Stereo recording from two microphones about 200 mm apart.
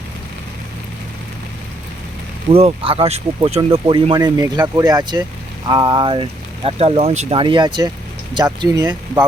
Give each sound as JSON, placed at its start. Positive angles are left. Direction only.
{"t": 2.5, "sound": "speech", "side_deg": -30}